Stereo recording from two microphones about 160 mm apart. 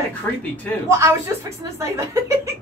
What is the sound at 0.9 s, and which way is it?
Speech, 20° right (ahead or behind).